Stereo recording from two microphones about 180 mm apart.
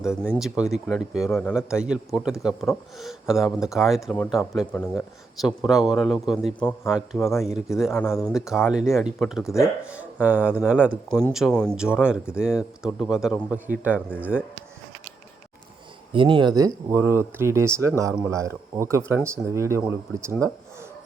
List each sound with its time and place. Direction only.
0.0 s speech: 5° right (ahead or behind)
9.4 s speech: 15° left (ahead or behind)
9.9 s speech: 10° right (ahead or behind)
16.1 s speech: 25° right (ahead or behind)